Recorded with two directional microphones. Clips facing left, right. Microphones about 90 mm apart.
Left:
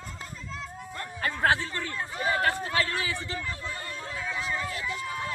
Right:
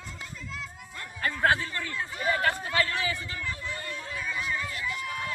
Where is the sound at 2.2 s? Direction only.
25° left (ahead or behind).